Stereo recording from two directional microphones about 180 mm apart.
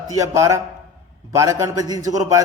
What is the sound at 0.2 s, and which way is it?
A man's voice, 15° right (ahead or behind).